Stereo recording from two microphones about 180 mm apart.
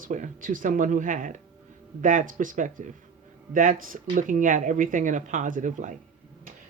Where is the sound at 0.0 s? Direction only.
45° right (ahead or behind).